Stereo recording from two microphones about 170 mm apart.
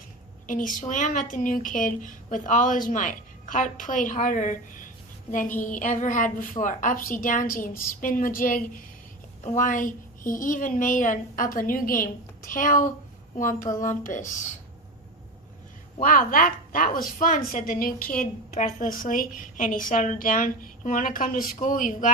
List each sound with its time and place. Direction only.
0.4 s a woman's voice: 50° left (ahead or behind)
16.0 s a woman's voice: 55° left (ahead or behind)